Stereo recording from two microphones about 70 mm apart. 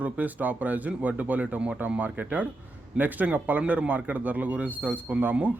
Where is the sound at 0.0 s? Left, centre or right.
Right.